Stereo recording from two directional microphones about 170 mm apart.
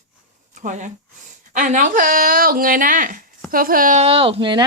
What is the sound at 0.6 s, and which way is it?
A woman's voice, 45° right (ahead or behind).